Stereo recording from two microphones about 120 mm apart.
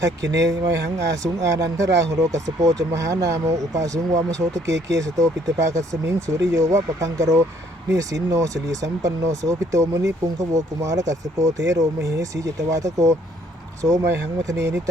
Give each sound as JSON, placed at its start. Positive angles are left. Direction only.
{"t": 0.0, "sound": "speech", "side_deg": -30}